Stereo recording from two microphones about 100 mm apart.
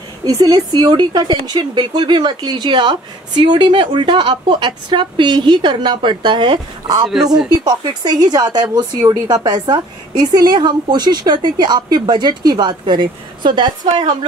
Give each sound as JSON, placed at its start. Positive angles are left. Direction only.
{"t": 0.2, "sound": "speech", "side_deg": -40}